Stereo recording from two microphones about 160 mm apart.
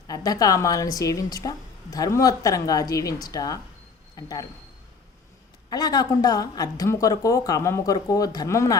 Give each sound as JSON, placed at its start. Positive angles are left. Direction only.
{"t": 0.1, "sound": "a woman's voice", "side_deg": 20}
{"t": 5.7, "sound": "a woman's voice", "side_deg": 25}